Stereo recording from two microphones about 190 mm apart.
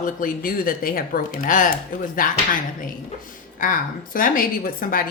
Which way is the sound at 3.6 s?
45° left (ahead or behind).